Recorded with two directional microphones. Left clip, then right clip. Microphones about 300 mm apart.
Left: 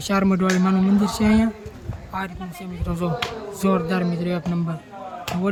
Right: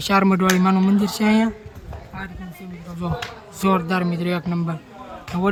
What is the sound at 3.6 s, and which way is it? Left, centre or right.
Speech, centre.